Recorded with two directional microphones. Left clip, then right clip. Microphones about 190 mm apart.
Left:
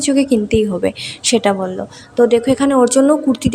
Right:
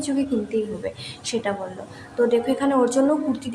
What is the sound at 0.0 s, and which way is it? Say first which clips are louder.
A woman's voice: left 10 dB; 40° left (ahead or behind).